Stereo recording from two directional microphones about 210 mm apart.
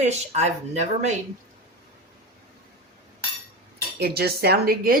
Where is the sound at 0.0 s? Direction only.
30° right (ahead or behind).